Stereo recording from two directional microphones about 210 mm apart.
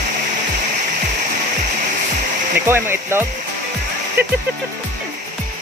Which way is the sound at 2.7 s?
10° right (ahead or behind).